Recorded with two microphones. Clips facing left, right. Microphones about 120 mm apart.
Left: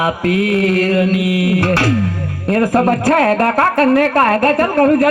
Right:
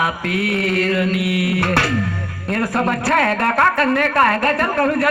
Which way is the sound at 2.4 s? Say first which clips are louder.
Left 6 dB; 40° left (ahead or behind).